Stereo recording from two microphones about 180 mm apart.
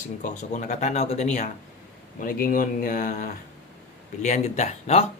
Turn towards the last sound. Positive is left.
turn(degrees=35)  # may be behind; listen again after turning